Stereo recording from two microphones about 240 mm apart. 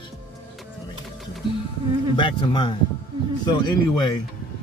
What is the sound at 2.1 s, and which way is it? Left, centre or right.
Speech, centre.